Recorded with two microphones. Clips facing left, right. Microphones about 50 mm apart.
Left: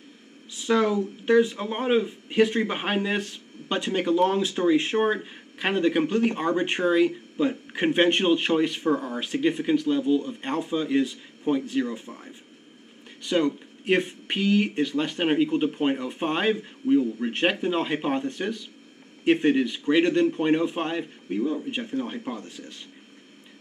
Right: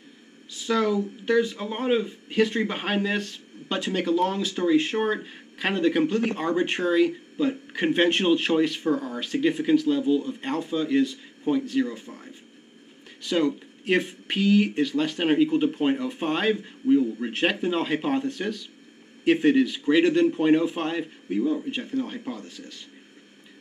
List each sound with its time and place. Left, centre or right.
0.7 s a man's voice: centre